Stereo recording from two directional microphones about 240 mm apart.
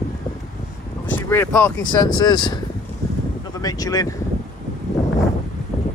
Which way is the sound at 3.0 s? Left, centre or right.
Centre.